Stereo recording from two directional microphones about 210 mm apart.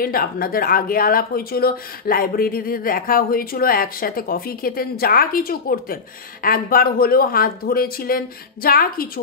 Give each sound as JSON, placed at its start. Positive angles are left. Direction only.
{"t": 0.0, "sound": "speech", "side_deg": 45}